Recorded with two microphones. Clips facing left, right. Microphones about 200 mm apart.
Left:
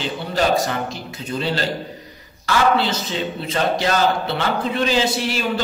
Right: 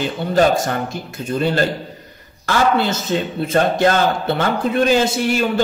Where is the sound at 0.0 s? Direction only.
50° right (ahead or behind).